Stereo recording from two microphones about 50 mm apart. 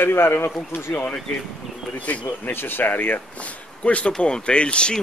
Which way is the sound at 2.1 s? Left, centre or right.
Left.